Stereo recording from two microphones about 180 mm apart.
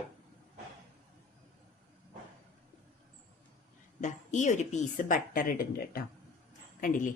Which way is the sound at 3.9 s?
40° left (ahead or behind).